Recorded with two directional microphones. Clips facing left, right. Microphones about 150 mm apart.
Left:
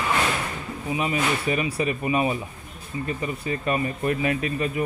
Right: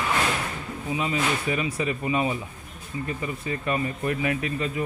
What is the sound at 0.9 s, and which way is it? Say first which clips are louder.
Speech: left 1 dB; 20° left (ahead or behind).